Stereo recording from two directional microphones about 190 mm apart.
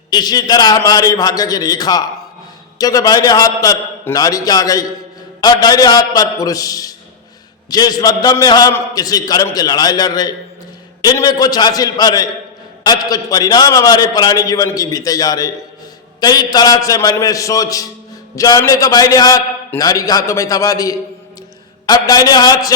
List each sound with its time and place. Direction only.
0.1 s a man's voice: 20° left (ahead or behind)